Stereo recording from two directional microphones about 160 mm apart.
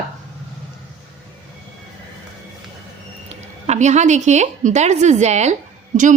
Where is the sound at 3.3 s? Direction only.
45° right (ahead or behind).